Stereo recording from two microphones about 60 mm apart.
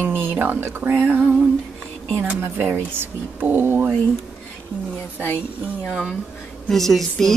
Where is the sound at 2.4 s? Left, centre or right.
Right.